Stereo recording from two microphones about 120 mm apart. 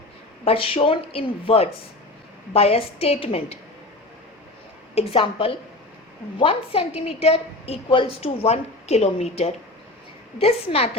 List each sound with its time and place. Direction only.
0.4 s a woman's voice: 50° left (ahead or behind)
4.9 s a woman's voice: 50° left (ahead or behind)